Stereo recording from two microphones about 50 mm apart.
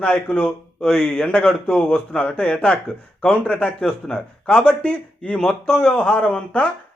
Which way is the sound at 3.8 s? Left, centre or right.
Centre.